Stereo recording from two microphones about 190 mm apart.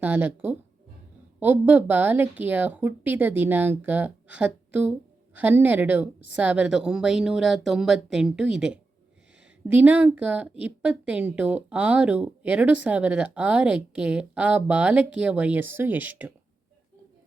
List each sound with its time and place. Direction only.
0.0 s a woman's voice: 10° right (ahead or behind)